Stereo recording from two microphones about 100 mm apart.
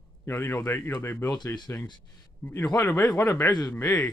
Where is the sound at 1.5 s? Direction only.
40° left (ahead or behind).